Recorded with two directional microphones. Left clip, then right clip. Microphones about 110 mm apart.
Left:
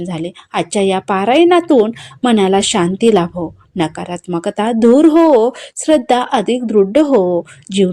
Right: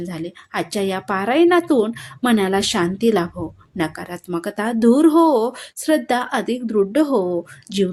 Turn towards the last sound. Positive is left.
turn(degrees=25)  # may be behind; listen again after turning